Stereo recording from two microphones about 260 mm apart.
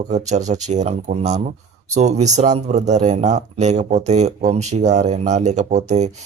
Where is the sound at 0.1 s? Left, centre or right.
Right.